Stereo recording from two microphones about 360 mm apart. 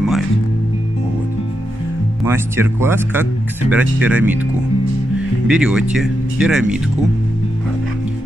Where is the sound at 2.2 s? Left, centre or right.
Centre.